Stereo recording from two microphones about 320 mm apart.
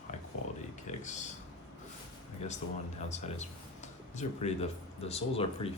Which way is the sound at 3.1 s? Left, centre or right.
Left.